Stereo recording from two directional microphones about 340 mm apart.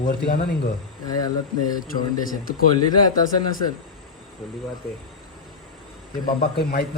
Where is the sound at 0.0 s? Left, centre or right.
Left.